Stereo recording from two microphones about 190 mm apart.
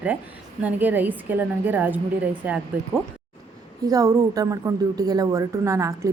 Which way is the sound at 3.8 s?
20° right (ahead or behind).